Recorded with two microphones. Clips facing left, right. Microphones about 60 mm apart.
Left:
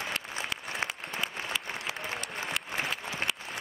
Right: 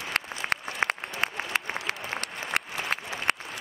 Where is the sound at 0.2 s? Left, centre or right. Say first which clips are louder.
Right 8 dB; right.